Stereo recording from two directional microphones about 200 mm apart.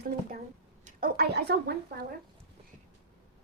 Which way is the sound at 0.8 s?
45° right (ahead or behind).